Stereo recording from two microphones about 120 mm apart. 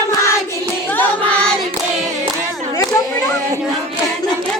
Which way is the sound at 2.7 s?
25° left (ahead or behind).